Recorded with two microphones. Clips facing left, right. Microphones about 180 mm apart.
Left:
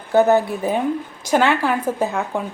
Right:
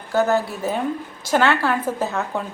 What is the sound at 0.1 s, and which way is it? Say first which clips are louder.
A woman's voice: left 5 dB; 20° left (ahead or behind).